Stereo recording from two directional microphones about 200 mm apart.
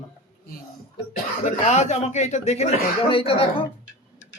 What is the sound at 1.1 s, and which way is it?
Speech, 35° left (ahead or behind).